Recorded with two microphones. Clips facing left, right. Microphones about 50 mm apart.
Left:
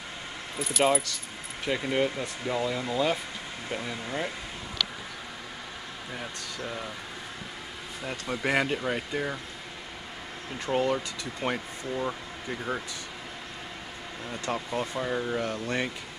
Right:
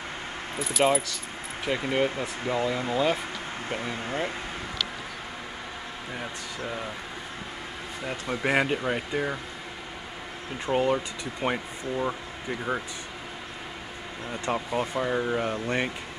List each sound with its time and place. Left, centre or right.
0.6 s speech: centre
1.8 s speech: centre
2.4 s speech: right
6.1 s speech: centre
8.0 s speech: centre
10.6 s speech: centre
14.3 s speech: centre